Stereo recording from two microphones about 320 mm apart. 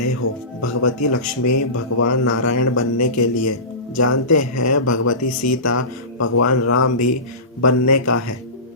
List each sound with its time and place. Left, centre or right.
0.0 s speech: left